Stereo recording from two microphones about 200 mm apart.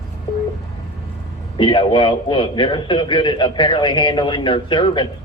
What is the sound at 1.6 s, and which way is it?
A man's voice, 25° left (ahead or behind).